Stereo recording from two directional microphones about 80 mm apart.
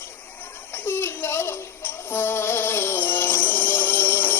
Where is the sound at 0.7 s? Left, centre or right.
Left.